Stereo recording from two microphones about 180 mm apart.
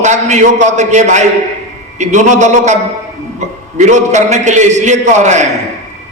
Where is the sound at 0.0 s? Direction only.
40° right (ahead or behind).